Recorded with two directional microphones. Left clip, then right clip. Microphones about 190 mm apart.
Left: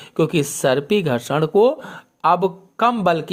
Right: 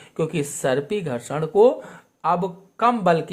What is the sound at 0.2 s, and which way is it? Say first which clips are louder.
Speech: left 6 dB; 25° left (ahead or behind).